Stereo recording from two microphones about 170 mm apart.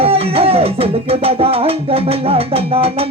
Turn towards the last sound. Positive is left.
turn(degrees=-35)  # may be behind; listen again after turning